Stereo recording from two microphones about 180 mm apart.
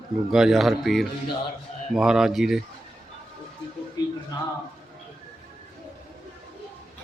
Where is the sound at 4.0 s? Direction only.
20° left (ahead or behind).